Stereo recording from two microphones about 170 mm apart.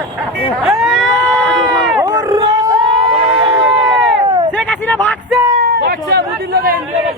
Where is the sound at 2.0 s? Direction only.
20° right (ahead or behind).